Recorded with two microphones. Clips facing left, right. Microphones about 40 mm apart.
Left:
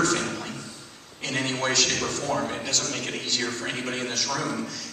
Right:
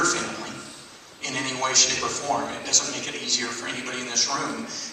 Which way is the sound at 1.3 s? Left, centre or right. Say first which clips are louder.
Even; left.